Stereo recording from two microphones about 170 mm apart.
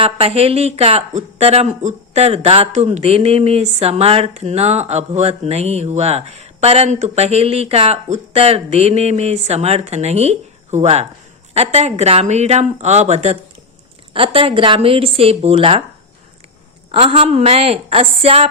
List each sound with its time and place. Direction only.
0.0 s speech: 35° right (ahead or behind)
16.9 s speech: 35° right (ahead or behind)